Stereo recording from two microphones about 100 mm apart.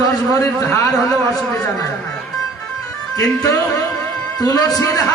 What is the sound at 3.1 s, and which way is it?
A man's voice, 35° left (ahead or behind).